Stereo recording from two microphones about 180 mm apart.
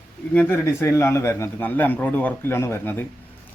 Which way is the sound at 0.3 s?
10° left (ahead or behind).